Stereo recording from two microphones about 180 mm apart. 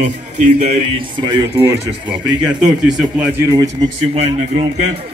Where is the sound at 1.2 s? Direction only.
20° right (ahead or behind).